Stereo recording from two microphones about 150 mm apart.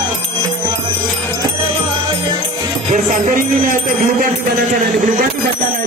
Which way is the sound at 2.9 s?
60° right (ahead or behind).